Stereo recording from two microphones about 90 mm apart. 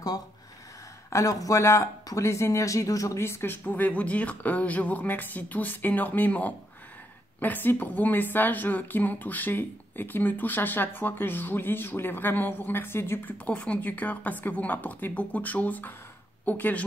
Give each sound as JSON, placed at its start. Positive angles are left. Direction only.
{"t": 1.1, "sound": "a woman's voice", "side_deg": 40}
{"t": 13.5, "sound": "a woman's voice", "side_deg": 15}